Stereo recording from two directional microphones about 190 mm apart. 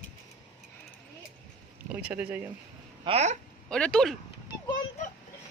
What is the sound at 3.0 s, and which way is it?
Speech, 35° right (ahead or behind).